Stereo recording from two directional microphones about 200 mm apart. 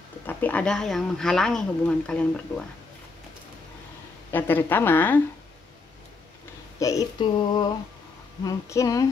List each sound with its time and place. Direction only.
0.3 s speech: 10° left (ahead or behind)
4.3 s a woman's voice: 10° left (ahead or behind)
6.8 s a sound: 20° left (ahead or behind)
8.5 s a woman's voice: 15° left (ahead or behind)